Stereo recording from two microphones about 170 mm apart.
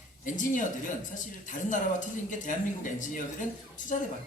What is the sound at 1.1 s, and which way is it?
Speech, 50° left (ahead or behind).